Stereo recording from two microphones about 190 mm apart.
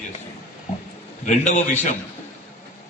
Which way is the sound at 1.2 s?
40° left (ahead or behind).